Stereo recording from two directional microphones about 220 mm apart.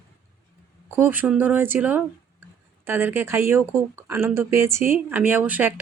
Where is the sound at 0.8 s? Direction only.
10° right (ahead or behind).